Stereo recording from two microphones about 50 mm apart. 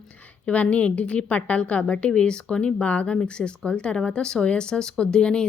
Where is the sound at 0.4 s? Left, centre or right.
Left.